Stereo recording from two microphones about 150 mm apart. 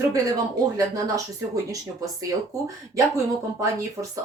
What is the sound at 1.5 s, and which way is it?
Speech, 25° right (ahead or behind).